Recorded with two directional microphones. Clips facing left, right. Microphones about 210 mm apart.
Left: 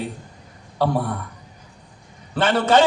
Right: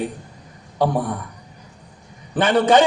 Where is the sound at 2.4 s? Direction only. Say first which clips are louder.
Right 2 dB; 15° right (ahead or behind).